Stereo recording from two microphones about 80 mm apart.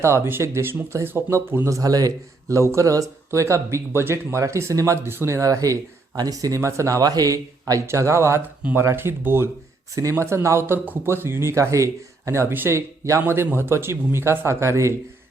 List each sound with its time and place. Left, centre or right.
0.0 s speech: right
7.9 s speech: right
9.9 s speech: right